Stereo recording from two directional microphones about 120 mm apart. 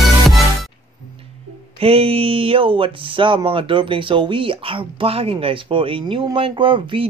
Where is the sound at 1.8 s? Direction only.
55° right (ahead or behind).